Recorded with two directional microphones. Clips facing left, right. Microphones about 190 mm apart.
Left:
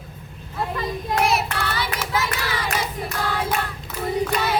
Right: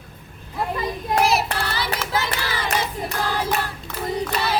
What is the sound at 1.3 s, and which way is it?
Hands, 30° right (ahead or behind).